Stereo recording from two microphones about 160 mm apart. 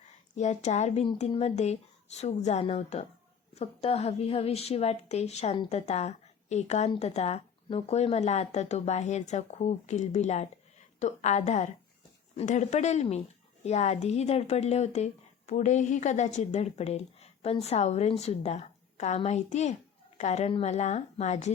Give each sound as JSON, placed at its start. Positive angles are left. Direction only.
{"t": 0.3, "sound": "a woman's voice", "side_deg": 45}